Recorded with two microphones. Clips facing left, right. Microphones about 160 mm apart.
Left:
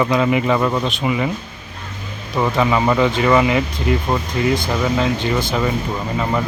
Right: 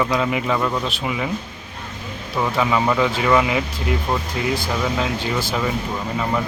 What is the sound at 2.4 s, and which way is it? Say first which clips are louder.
Speech: left 3 dB; 5° left (ahead or behind).